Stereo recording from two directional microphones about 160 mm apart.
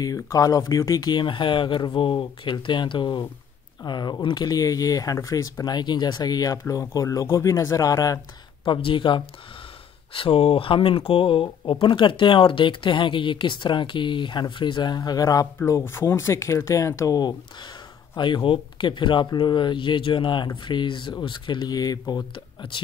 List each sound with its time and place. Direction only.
0.0 s speech: 20° left (ahead or behind)